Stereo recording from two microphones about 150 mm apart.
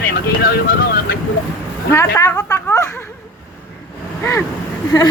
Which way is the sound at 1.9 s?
20° left (ahead or behind).